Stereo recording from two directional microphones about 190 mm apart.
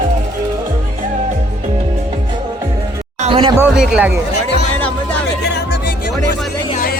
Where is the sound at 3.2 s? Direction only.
30° right (ahead or behind).